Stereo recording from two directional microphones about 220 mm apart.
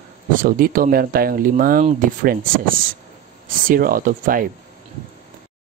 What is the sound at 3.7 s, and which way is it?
Speech, 40° right (ahead or behind).